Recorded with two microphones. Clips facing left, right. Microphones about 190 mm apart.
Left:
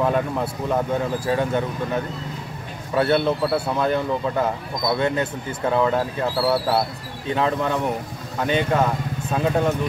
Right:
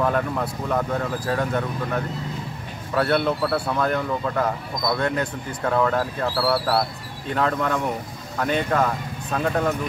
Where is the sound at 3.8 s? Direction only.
20° left (ahead or behind).